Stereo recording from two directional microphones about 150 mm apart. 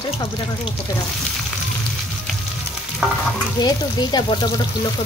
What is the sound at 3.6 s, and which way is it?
Speech, 30° left (ahead or behind).